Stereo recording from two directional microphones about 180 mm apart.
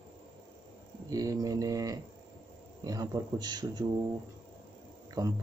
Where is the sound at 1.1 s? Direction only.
20° right (ahead or behind).